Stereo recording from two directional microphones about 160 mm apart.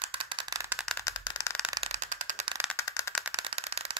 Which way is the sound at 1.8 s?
45° right (ahead or behind).